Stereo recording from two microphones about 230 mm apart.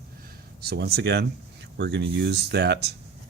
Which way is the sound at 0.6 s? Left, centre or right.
Right.